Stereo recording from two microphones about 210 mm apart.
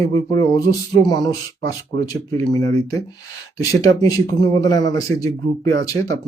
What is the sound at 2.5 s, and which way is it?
Speech, 15° left (ahead or behind).